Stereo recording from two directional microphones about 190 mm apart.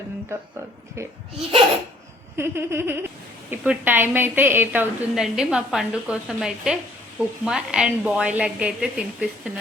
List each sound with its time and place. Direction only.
2.3 s a woman's voice: 15° right (ahead or behind)